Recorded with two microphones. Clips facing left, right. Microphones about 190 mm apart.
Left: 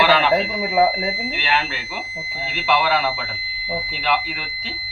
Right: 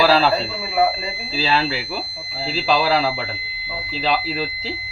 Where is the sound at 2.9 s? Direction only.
25° right (ahead or behind).